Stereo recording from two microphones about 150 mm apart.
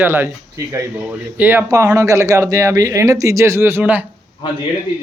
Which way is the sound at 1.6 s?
20° right (ahead or behind).